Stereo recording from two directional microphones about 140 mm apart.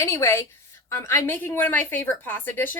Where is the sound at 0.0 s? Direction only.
20° left (ahead or behind).